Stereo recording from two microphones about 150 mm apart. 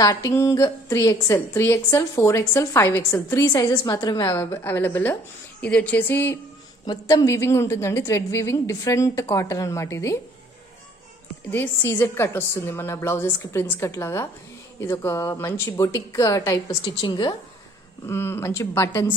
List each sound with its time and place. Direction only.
0.0 s a woman's voice: 25° left (ahead or behind)
11.5 s a woman's voice: 15° left (ahead or behind); by 17.4 s 30° left (ahead or behind)
18.0 s a woman's voice: 15° left (ahead or behind)